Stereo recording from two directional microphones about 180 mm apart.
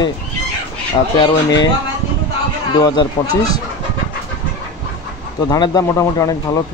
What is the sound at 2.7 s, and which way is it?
Speech, 20° left (ahead or behind).